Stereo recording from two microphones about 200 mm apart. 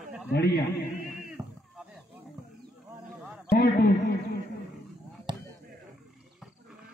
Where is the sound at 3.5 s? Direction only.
50° left (ahead or behind).